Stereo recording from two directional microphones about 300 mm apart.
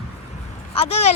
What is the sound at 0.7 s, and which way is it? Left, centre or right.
Speech, left.